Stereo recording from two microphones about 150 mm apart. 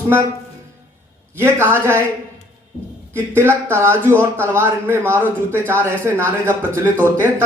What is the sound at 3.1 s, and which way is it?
A man's voice, 15° right (ahead or behind).